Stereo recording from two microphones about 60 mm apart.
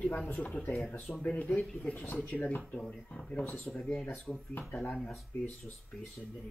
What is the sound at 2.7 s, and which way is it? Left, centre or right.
Speech, left.